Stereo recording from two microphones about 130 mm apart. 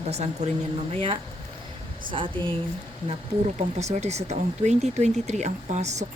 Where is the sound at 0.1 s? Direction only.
60° right (ahead or behind).